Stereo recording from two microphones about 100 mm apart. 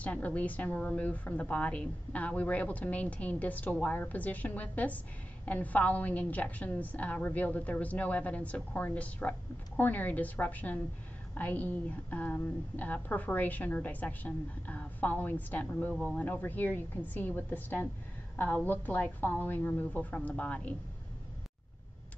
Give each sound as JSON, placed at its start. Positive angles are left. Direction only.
{"t": 0.0, "sound": "a woman's voice", "side_deg": 15}